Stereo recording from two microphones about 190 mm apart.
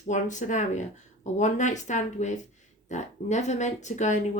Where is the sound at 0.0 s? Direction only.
40° left (ahead or behind).